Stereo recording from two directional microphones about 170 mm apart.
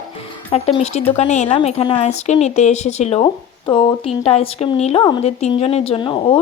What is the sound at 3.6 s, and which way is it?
Speech, 25° left (ahead or behind).